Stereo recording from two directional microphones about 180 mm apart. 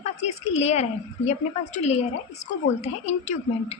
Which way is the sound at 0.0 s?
35° left (ahead or behind).